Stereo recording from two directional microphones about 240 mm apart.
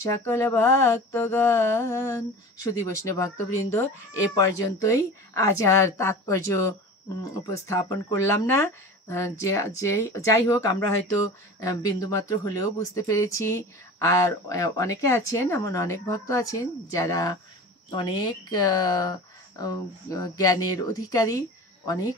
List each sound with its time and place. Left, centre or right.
0.0 s speech: centre